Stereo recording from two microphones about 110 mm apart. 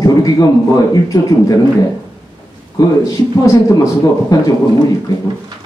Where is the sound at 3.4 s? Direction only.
30° left (ahead or behind).